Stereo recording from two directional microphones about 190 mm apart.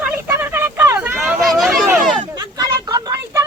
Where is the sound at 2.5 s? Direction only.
20° right (ahead or behind).